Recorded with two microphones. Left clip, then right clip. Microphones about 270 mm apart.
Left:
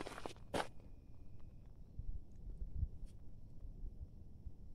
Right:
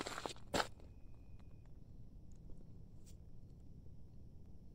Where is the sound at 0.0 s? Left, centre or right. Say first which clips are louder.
Right 3 dB; right.